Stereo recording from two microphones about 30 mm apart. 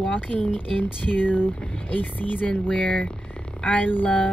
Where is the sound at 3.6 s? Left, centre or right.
Left.